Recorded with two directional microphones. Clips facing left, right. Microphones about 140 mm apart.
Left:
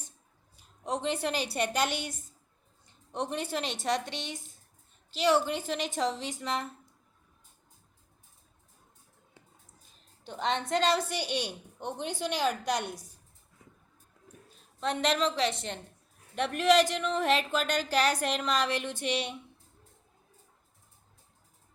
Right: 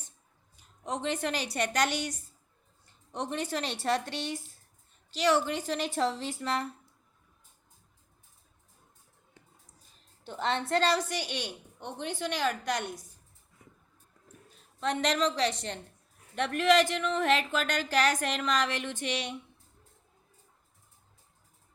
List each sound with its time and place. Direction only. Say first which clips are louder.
0.5 s a woman's voice: left 2 dB; 30° left (ahead or behind)
3.5 s a woman's voice: right 2 dB; centre (ahead or behind)
5.1 s a woman's voice: left 1 dB; 30° left (ahead or behind)
5.6 s a woman's voice: right 1 dB; centre (ahead or behind)
10.2 s a man's voice: even; 15° left (ahead or behind); by 11.9 s 35° left (ahead or behind)
11.9 s a man's voice: left 1 dB; 10° left (ahead or behind)
14.8 s a woman's voice: even; 30° left (ahead or behind)
16.6 s a man's voice: even; 15° left (ahead or behind)
17.2 s speech: left 1 dB; 30° left (ahead or behind)